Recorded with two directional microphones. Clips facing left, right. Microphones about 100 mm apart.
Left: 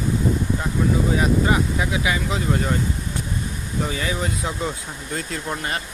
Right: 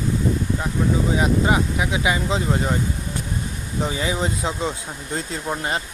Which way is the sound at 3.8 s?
20° right (ahead or behind).